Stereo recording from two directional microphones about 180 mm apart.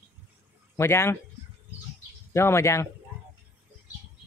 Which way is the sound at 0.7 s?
15° left (ahead or behind).